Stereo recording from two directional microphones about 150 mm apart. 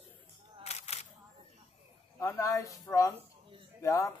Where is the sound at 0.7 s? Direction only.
45° left (ahead or behind).